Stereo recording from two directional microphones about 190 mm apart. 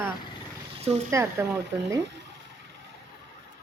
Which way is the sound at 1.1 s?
15° right (ahead or behind).